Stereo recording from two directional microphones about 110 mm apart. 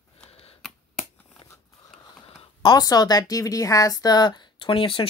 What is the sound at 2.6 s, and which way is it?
Speech, 35° left (ahead or behind).